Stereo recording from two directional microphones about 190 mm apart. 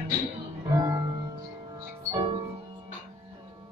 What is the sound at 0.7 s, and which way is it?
Music, 20° right (ahead or behind).